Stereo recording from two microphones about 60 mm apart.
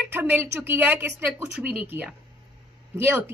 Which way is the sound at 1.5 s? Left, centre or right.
Right.